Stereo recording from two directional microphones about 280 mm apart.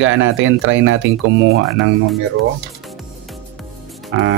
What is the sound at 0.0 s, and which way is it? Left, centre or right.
Speech, right.